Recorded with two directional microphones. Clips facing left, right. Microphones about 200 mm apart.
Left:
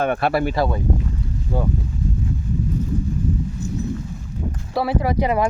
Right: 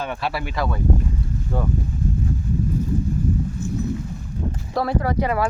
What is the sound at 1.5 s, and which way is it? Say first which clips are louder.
Speech: left 2 dB; 10° left (ahead or behind).